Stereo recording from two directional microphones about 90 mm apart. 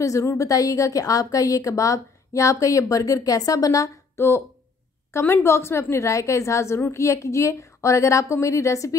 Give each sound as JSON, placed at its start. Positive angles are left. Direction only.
{"t": 0.0, "sound": "a woman's voice", "side_deg": 35}